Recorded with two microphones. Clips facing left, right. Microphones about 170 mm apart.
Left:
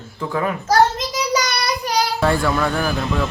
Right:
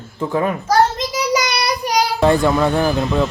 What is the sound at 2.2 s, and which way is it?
Speech, 20° right (ahead or behind).